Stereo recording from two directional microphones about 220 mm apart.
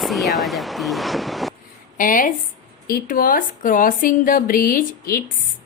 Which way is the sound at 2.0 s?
40° left (ahead or behind).